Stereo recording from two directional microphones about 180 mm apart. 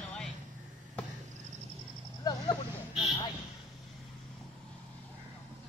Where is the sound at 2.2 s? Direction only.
20° left (ahead or behind).